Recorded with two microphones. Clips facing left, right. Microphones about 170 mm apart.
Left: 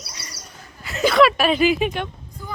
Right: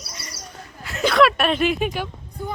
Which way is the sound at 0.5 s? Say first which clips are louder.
Left 2 dB; centre (ahead or behind).